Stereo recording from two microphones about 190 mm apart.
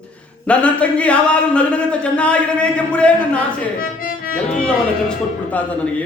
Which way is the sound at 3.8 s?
50° left (ahead or behind).